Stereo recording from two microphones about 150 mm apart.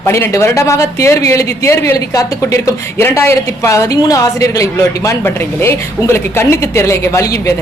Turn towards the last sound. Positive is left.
turn(degrees=20)  # may be behind; listen again after turning